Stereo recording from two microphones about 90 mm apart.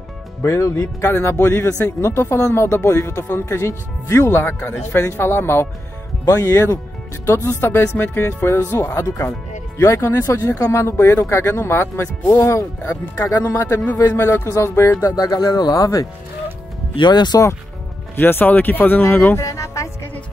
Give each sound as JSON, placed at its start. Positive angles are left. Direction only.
{"t": 0.4, "sound": "speech", "side_deg": 40}
{"t": 13.9, "sound": "speech", "side_deg": 35}
{"t": 17.1, "sound": "speech", "side_deg": 50}
{"t": 18.1, "sound": "speech", "side_deg": 25}
{"t": 19.4, "sound": "music", "side_deg": 35}